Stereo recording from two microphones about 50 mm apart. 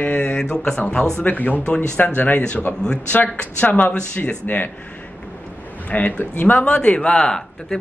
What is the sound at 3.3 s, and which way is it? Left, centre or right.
Speech, left.